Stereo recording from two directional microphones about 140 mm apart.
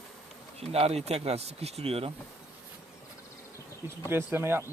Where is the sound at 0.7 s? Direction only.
45° right (ahead or behind).